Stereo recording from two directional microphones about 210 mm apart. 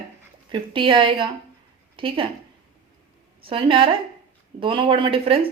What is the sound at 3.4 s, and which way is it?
Speech, 25° right (ahead or behind).